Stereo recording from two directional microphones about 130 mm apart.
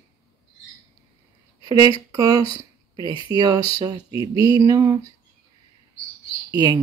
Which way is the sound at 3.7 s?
30° right (ahead or behind).